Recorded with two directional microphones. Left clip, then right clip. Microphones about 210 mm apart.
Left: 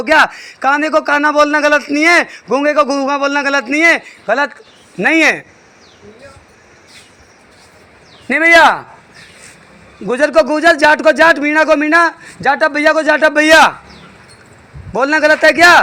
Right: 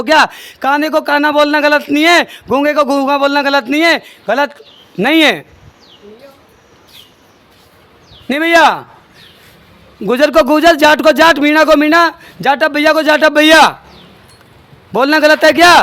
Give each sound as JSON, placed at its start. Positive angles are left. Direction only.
{"t": 0.1, "sound": "a man's voice", "side_deg": -25}
{"t": 8.3, "sound": "a man's voice", "side_deg": -30}
{"t": 10.1, "sound": "a man's voice", "side_deg": -35}
{"t": 14.9, "sound": "a man's voice", "side_deg": -35}